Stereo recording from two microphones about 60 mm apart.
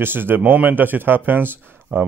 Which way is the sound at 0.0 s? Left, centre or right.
Right.